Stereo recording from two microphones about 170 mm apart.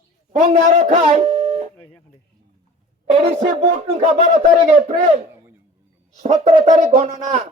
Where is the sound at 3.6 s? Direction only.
40° right (ahead or behind).